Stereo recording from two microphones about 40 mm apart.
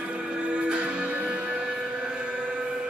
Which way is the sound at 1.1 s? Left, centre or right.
Right.